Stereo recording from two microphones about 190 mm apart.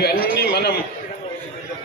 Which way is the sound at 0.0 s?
55° left (ahead or behind).